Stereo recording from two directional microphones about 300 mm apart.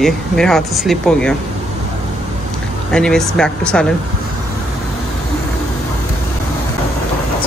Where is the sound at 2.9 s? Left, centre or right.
Centre.